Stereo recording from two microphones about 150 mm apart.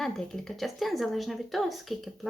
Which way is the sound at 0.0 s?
Centre (ahead or behind).